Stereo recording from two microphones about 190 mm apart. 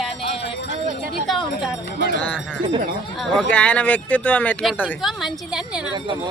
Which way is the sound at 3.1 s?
Centre (ahead or behind).